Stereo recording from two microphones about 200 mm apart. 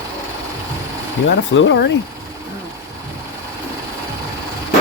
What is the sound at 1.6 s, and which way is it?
Speech, 60° left (ahead or behind).